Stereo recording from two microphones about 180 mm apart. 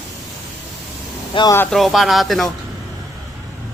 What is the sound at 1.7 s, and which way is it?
Speech, centre (ahead or behind).